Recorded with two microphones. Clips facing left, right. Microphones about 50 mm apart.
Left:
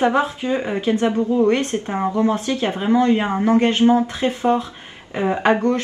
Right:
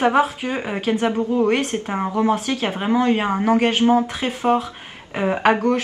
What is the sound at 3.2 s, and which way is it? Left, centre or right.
Speech, centre.